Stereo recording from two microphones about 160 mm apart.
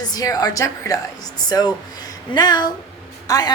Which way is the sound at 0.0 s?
25° left (ahead or behind).